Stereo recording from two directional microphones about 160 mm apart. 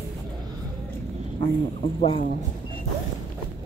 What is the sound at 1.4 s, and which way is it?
Speech, 35° left (ahead or behind).